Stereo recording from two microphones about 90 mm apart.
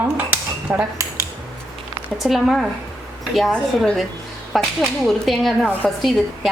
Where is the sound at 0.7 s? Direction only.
15° right (ahead or behind).